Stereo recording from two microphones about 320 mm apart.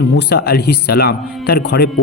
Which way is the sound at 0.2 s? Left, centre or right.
Left.